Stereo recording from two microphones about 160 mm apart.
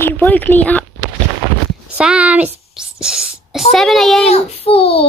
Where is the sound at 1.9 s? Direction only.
5° right (ahead or behind).